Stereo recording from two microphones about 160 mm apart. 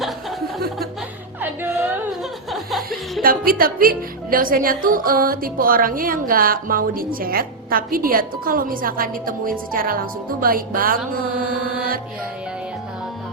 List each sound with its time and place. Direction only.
1.4 s music: 10° right (ahead or behind)
2.5 s music: centre (ahead or behind)
3.2 s a woman's voice: 65° right (ahead or behind)